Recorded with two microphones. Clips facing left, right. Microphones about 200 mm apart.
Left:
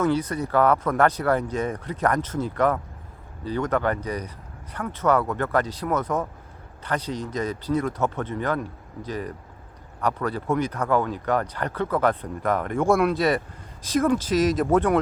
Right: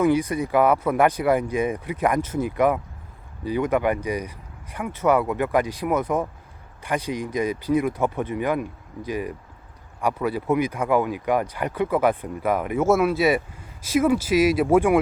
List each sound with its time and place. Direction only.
0.0 s speech: 10° right (ahead or behind)